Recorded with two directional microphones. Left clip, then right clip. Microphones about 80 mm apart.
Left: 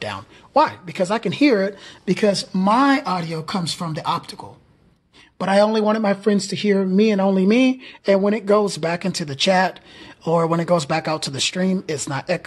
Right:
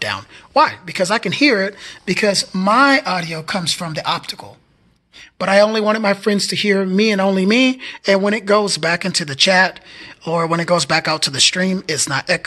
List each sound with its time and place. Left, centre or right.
0.0 s speech: centre
1.4 s speech: left
1.8 s speech: left
2.2 s a man's voice: left
10.2 s speech: left
10.5 s speech: left